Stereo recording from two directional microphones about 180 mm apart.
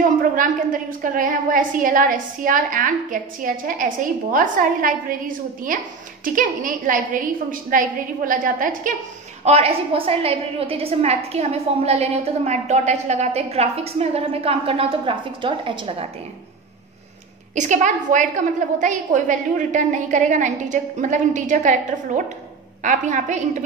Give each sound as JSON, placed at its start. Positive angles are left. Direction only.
{"t": 0.4, "sound": "a woman's voice", "side_deg": -50}
{"t": 9.4, "sound": "a woman's voice", "side_deg": -35}
{"t": 17.6, "sound": "a woman's voice", "side_deg": -45}